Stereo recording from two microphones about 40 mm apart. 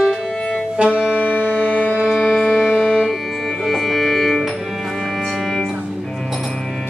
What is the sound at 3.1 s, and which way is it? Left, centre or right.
Music, centre.